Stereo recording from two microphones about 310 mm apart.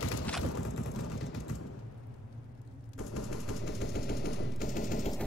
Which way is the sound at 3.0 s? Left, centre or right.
Left.